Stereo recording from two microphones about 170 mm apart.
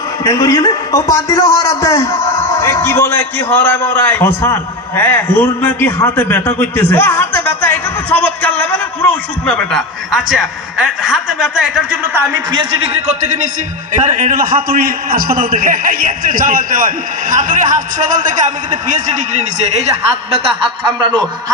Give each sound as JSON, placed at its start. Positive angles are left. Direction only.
{"t": 0.2, "sound": "a man's voice", "side_deg": 20}
{"t": 12.5, "sound": "a man's voice", "side_deg": -40}